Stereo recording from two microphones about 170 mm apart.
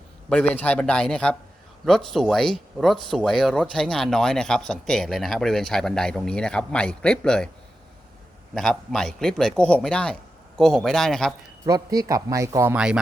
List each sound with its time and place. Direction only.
0.3 s speech: 5° left (ahead or behind)
8.5 s speech: centre (ahead or behind)
11.6 s speech: 20° right (ahead or behind)